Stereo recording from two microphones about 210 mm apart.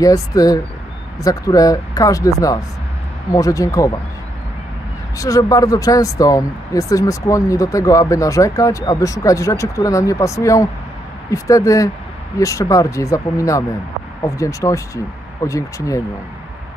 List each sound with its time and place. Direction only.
0.0 s speech: 15° left (ahead or behind)
5.2 s speech: 15° left (ahead or behind)